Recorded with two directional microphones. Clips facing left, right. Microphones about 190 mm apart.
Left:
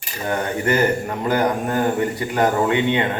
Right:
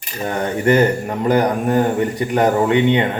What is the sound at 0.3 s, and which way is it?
Speech, 20° right (ahead or behind).